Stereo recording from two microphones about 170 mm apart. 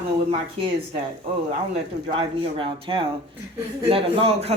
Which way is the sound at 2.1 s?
30° right (ahead or behind).